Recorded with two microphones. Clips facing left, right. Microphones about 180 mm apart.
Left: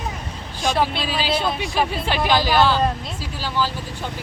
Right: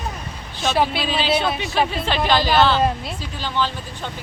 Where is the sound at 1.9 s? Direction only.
10° left (ahead or behind).